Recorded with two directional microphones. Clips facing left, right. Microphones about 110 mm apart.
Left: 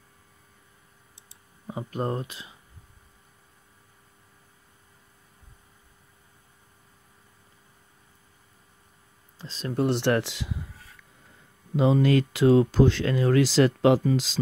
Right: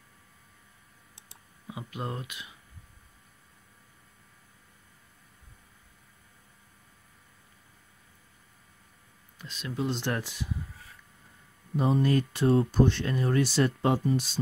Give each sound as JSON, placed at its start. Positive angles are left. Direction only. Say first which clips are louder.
{"t": 1.7, "sound": "speech", "louder": "left 7 dB", "side_deg": 40}
{"t": 9.4, "sound": "speech", "louder": "left 5 dB", "side_deg": 35}
{"t": 9.8, "sound": "speech", "louder": "left 8 dB", "side_deg": 70}
{"t": 11.7, "sound": "speech", "louder": "left 4 dB", "side_deg": 90}